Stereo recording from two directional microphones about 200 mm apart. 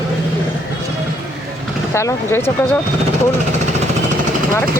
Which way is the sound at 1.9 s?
15° left (ahead or behind).